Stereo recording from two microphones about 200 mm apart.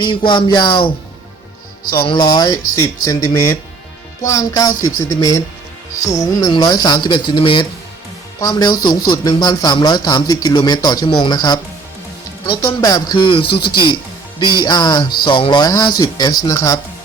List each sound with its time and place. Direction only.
0.0 s a man's voice: 25° left (ahead or behind)
2.0 s a man's voice: 20° left (ahead or behind)
12.6 s a man's voice: 20° left (ahead or behind)